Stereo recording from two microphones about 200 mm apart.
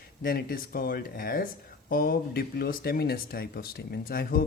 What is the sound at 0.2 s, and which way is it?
Speech, 45° left (ahead or behind).